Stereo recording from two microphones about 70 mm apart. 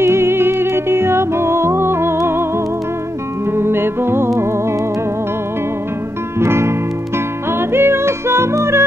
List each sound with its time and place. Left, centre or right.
0.0 s music: right
3.5 s music: right
6.4 s music: right